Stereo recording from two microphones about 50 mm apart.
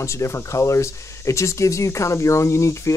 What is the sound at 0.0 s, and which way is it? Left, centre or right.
Speech, left.